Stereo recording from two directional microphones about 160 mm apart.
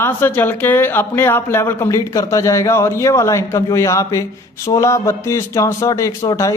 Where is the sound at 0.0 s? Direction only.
15° left (ahead or behind).